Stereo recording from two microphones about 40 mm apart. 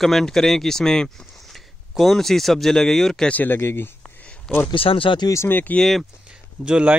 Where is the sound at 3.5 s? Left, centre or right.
Left.